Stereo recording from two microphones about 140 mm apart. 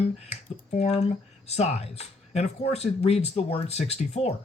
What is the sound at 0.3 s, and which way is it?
Speech, 50° left (ahead or behind).